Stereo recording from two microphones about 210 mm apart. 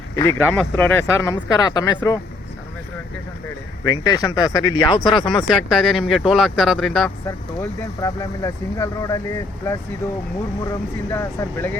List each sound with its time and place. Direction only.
0.2 s speech: 10° left (ahead or behind)
3.8 s speech: 15° left (ahead or behind)
5.5 s speech: centre (ahead or behind)
7.3 s speech: 15° left (ahead or behind)